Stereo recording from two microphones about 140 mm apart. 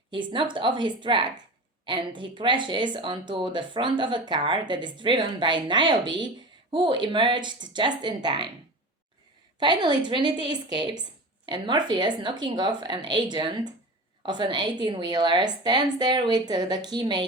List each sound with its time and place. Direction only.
0.1 s speech: 35° right (ahead or behind)
9.6 s speech: 30° right (ahead or behind)